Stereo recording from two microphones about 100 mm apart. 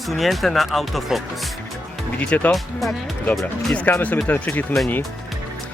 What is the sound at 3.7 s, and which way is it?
Speech, 15° left (ahead or behind).